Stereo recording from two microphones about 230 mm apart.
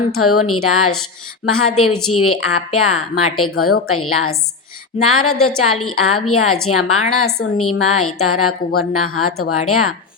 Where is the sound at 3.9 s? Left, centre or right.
Left.